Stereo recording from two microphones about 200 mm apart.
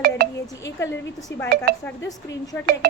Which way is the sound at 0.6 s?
15° left (ahead or behind).